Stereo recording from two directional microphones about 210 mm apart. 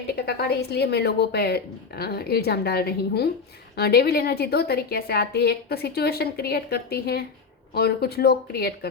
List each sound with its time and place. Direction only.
0.2 s a woman's voice: 50° left (ahead or behind)